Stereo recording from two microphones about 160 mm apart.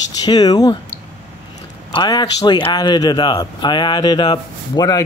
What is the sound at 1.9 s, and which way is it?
Speech, 25° left (ahead or behind).